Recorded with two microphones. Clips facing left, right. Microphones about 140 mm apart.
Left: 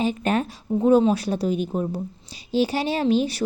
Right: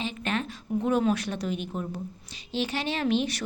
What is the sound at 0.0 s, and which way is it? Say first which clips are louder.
A woman's voice: left 8 dB; 40° left (ahead or behind).